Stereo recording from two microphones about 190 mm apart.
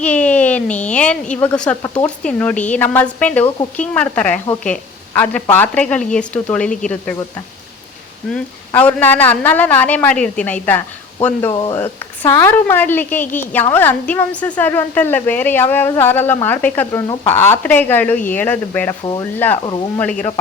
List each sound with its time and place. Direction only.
0.0 s a woman's voice: 5° left (ahead or behind)
11.3 s speech: 20° left (ahead or behind)